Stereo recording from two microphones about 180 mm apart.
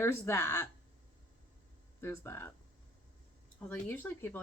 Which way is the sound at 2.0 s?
15° left (ahead or behind).